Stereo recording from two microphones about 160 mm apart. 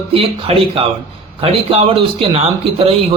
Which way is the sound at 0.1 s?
35° right (ahead or behind).